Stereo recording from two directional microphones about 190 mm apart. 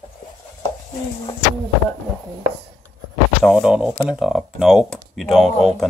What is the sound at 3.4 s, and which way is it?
Speech, centre (ahead or behind).